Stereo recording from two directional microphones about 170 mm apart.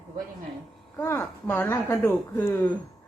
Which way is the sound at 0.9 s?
15° left (ahead or behind).